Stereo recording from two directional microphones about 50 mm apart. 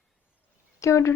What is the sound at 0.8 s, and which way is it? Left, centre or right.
Speech, left.